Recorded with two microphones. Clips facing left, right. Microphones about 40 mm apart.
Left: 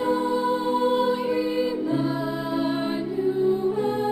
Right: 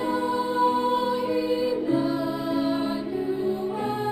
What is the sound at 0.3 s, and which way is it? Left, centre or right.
Music, left.